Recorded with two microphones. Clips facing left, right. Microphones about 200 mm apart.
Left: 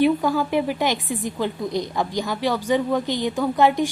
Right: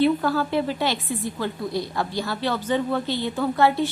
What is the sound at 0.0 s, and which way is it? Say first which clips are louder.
A woman's voice: left 1 dB; 15° left (ahead or behind).